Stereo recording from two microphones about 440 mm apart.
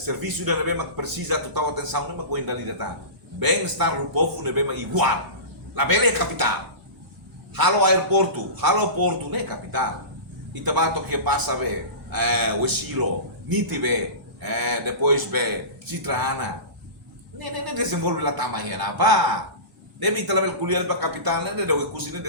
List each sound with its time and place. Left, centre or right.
0.0 s a man's voice: right
7.5 s a man's voice: right